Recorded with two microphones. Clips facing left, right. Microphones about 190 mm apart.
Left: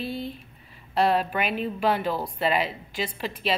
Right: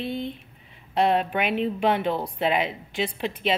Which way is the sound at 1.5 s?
25° right (ahead or behind).